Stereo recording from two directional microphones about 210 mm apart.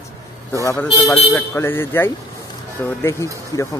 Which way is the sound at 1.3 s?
10° left (ahead or behind).